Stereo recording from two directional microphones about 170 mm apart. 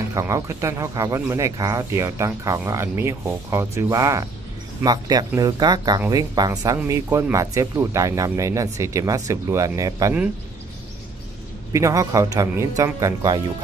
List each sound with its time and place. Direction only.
0.1 s speech: 15° right (ahead or behind)
11.7 s speech: 20° right (ahead or behind)